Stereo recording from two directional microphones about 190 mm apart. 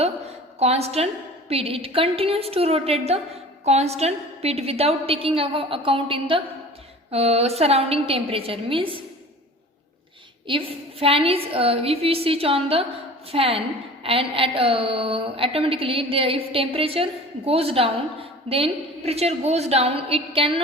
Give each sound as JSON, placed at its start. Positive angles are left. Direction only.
{"t": 0.6, "sound": "a woman's voice", "side_deg": -35}
{"t": 10.4, "sound": "a woman's voice", "side_deg": -30}